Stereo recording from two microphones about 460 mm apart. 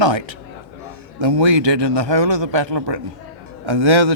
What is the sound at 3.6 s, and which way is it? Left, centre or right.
Speech, right.